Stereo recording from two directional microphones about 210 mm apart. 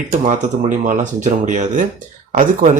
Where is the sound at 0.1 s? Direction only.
35° right (ahead or behind).